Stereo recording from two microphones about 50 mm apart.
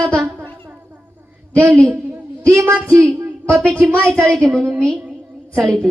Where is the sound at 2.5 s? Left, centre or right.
Right.